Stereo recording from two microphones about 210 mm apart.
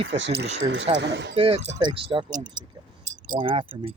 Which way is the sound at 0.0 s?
55° right (ahead or behind).